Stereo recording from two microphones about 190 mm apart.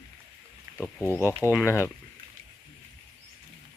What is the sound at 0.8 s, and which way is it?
Speech, 10° left (ahead or behind).